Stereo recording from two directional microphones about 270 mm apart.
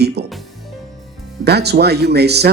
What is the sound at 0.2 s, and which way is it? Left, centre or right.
Music, right.